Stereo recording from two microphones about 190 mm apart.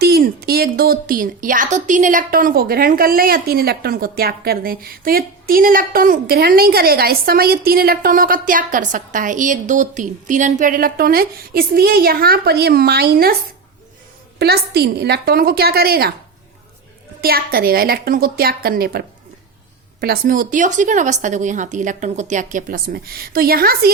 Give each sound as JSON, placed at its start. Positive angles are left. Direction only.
{"t": 0.0, "sound": "a woman's voice", "side_deg": -55}
{"t": 14.3, "sound": "a woman's voice", "side_deg": -55}
{"t": 17.2, "sound": "a woman's voice", "side_deg": -50}